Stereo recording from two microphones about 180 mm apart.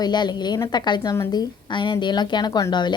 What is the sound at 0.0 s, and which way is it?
A woman's voice, 25° left (ahead or behind).